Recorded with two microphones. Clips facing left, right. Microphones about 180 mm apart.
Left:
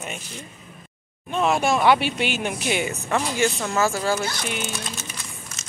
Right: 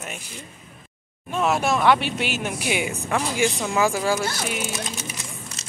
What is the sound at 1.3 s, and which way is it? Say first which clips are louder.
Speech: left 1 dB; 5° right (ahead or behind).